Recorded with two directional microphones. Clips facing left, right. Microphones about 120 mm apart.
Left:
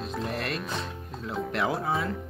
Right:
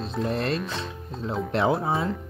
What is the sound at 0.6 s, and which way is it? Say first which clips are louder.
Speech: right 2 dB; centre (ahead or behind).